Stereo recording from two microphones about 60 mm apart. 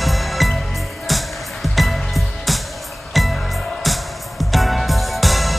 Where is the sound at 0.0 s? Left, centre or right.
Centre.